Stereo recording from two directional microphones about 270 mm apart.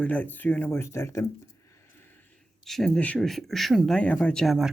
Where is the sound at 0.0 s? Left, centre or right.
Centre.